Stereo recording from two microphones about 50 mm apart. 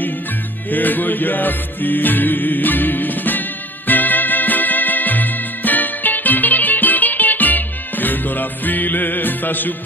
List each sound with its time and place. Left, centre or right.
0.7 s music: left